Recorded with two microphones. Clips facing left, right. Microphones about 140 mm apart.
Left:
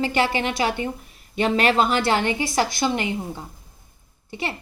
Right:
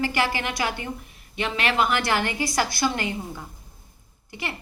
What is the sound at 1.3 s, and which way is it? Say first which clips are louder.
A woman's voice: left 6 dB; 35° left (ahead or behind).